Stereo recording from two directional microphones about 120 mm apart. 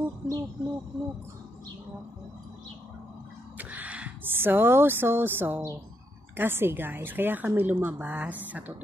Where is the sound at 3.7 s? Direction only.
10° right (ahead or behind).